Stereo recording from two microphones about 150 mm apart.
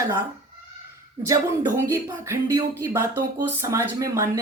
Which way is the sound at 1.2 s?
20° right (ahead or behind).